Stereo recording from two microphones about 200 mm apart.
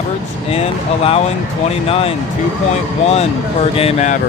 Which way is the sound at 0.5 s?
30° left (ahead or behind).